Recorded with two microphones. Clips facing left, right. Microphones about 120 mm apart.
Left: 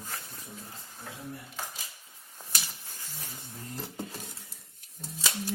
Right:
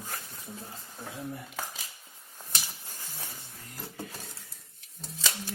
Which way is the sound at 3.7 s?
30° left (ahead or behind).